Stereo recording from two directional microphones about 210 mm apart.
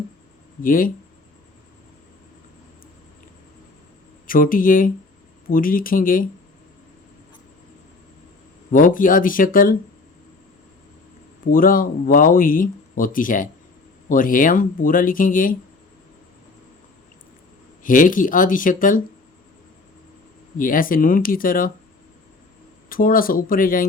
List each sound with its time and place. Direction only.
0.6 s speech: 40° left (ahead or behind)
4.3 s speech: 40° left (ahead or behind)
8.7 s speech: 40° left (ahead or behind)
11.5 s speech: 40° left (ahead or behind)
17.8 s speech: 40° left (ahead or behind)
20.6 s speech: 40° left (ahead or behind)
22.9 s speech: 40° left (ahead or behind)